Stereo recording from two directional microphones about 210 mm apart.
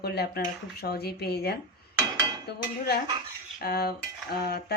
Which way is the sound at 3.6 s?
50° left (ahead or behind).